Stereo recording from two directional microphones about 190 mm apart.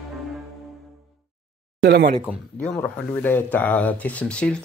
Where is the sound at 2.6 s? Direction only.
5° left (ahead or behind).